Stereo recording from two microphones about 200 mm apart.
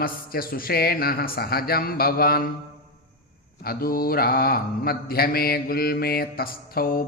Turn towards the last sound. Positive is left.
turn(degrees=45)  # may be behind; listen again after turning